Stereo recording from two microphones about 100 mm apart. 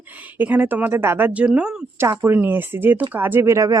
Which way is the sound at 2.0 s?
25° right (ahead or behind).